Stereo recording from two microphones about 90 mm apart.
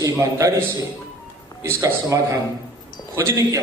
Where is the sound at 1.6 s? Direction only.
35° right (ahead or behind).